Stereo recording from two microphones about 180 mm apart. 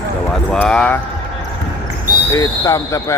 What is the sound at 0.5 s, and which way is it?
Speech, 5° left (ahead or behind).